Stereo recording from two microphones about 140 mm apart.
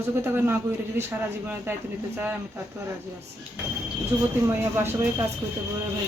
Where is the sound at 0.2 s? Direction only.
15° right (ahead or behind).